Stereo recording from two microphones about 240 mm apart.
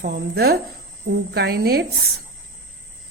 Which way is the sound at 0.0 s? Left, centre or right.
Right.